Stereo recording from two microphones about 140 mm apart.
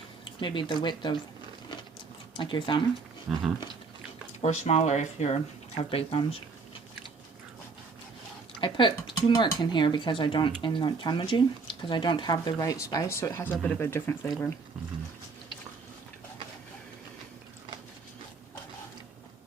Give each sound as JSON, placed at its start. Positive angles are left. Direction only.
{"t": 0.3, "sound": "speech", "side_deg": 35}
{"t": 2.3, "sound": "speech", "side_deg": 35}
{"t": 3.3, "sound": "speech", "side_deg": -5}
{"t": 4.4, "sound": "speech", "side_deg": 50}
{"t": 8.6, "sound": "speech", "side_deg": 35}